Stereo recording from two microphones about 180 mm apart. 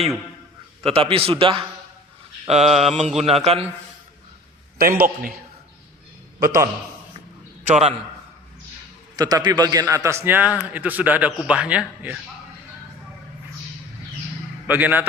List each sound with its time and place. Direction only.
0.9 s a man's voice: 30° right (ahead or behind)
4.8 s a man's voice: 55° right (ahead or behind)
6.4 s a man's voice: 15° right (ahead or behind)
7.7 s a man's voice: 35° right (ahead or behind)
9.1 s a man's voice: 20° right (ahead or behind); by 12.2 s 5° right (ahead or behind)
14.7 s a man's voice: 10° right (ahead or behind)